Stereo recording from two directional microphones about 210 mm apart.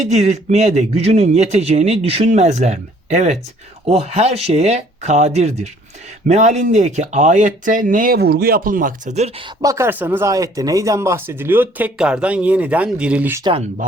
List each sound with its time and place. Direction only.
0.1 s speech: 35° right (ahead or behind)
9.6 s speech: 15° right (ahead or behind)
13.4 s speech: 25° right (ahead or behind)